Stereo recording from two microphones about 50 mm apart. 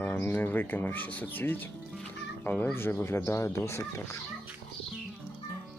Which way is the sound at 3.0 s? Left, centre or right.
Left.